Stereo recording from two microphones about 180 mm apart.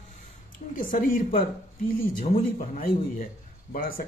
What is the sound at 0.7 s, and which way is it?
Speech, 50° left (ahead or behind).